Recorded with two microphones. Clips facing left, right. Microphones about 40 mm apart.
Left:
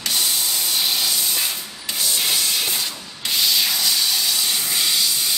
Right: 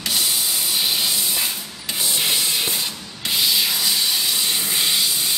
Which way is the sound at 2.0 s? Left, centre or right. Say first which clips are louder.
Even; centre.